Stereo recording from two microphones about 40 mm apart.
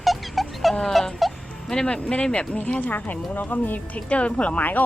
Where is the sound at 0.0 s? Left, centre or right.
Centre.